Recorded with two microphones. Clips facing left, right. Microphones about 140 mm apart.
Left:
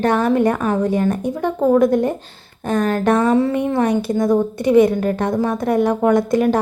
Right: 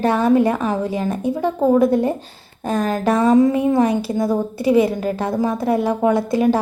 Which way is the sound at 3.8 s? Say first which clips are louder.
Left 1 dB; 30° right (ahead or behind).